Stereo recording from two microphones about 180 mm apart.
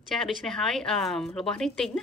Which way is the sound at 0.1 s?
Centre (ahead or behind).